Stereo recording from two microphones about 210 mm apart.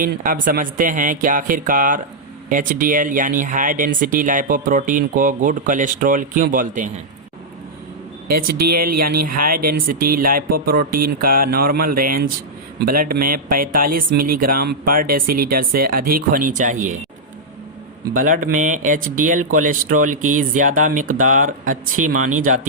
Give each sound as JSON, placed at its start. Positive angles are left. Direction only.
{"t": 0.0, "sound": "speech", "side_deg": -40}
{"t": 8.4, "sound": "speech", "side_deg": -45}
{"t": 18.1, "sound": "speech", "side_deg": -40}